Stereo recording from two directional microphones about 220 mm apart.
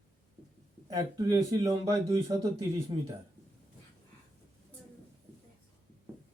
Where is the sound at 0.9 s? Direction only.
15° right (ahead or behind).